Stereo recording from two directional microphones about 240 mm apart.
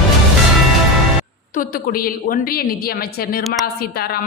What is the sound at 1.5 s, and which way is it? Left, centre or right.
Speech, left.